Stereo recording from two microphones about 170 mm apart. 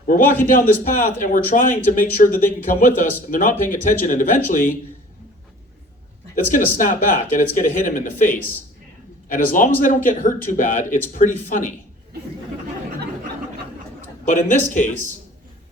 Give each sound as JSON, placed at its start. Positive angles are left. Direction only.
{"t": 0.1, "sound": "speech", "side_deg": 50}
{"t": 6.3, "sound": "speech", "side_deg": 50}
{"t": 14.3, "sound": "speech", "side_deg": 45}